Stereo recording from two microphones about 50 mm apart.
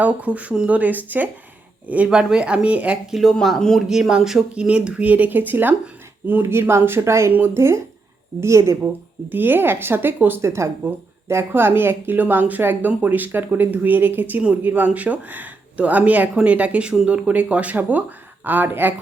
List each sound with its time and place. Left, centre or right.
0.0 s speech: right
0.8 s a woman's voice: right
2.0 s speech: centre
3.8 s speech: centre
4.6 s a woman's voice: right
6.4 s speech: right
7.3 s a woman's voice: right
8.4 s a woman's voice: right
9.3 s a woman's voice: right
10.4 s speech: right
11.3 s a woman's voice: right